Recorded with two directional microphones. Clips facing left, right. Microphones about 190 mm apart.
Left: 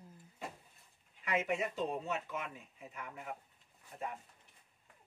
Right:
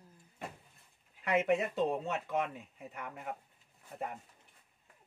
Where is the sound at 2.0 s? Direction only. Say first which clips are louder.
Right 5 dB; 65° right (ahead or behind).